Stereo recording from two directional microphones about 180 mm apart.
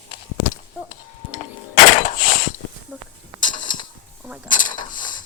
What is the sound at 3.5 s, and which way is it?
Mechanisms, 45° left (ahead or behind).